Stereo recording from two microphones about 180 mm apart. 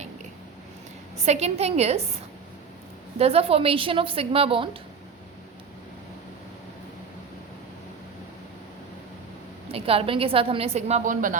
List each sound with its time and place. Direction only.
1.2 s a woman's voice: 35° right (ahead or behind)
3.2 s a woman's voice: 35° right (ahead or behind)
9.7 s a woman's voice: 30° right (ahead or behind)